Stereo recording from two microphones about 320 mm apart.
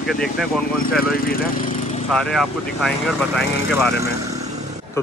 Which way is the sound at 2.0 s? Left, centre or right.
Centre.